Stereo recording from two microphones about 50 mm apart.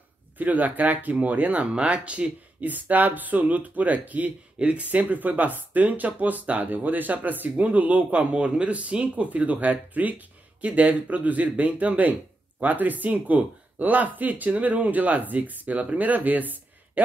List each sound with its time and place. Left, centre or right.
0.4 s speech: right
2.7 s speech: right
4.6 s speech: right
4.8 s speech: right